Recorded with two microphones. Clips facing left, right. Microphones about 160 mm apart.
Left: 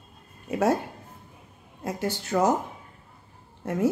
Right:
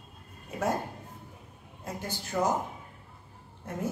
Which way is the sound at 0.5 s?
85° left.